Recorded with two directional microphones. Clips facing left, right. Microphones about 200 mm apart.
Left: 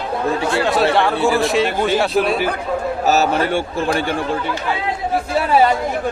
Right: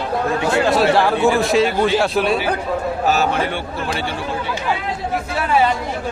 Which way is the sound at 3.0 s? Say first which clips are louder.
Left 3 dB; 40° left (ahead or behind).